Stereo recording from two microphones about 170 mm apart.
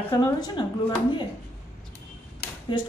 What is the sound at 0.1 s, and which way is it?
Speech, 25° left (ahead or behind).